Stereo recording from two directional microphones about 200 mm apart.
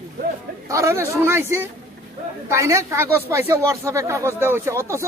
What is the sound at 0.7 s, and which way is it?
Speech, 15° right (ahead or behind).